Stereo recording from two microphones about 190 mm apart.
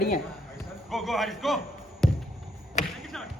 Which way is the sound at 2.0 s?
5° left (ahead or behind).